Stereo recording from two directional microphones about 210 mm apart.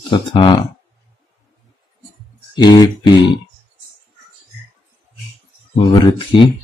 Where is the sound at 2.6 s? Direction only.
20° left (ahead or behind).